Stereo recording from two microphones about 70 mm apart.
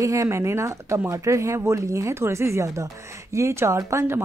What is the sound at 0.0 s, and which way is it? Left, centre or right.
Speech, right.